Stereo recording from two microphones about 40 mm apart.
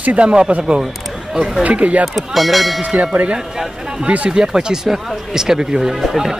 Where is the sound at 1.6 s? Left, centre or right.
Right.